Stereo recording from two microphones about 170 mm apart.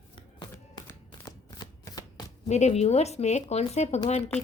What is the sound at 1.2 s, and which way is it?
Shuffling cards, 20° left (ahead or behind).